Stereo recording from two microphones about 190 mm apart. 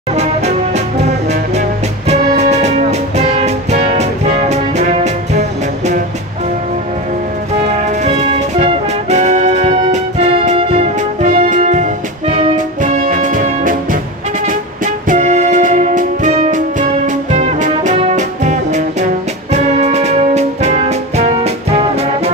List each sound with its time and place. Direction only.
2.0 s music: 35° right (ahead or behind)
7.6 s music: 35° right (ahead or behind)
15.0 s music: 40° right (ahead or behind)